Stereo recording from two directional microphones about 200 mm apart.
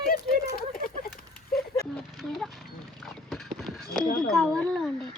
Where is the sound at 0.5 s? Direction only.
45° left (ahead or behind).